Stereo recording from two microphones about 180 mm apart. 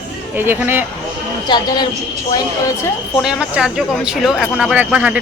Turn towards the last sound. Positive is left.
turn(degrees=-5)  # may be behind; listen again after turning